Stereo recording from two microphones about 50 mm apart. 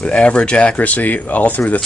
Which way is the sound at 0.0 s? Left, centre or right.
Left.